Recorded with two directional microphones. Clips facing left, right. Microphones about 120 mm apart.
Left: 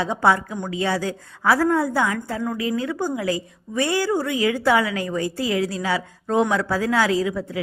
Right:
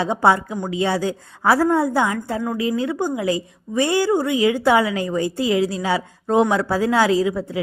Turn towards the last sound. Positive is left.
turn(degrees=-25)  # may be behind; listen again after turning